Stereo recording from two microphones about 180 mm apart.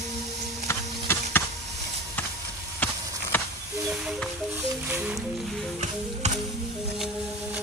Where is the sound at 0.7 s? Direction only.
15° left (ahead or behind).